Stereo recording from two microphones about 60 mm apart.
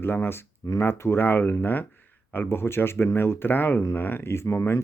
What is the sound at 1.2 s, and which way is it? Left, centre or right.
Speech, left.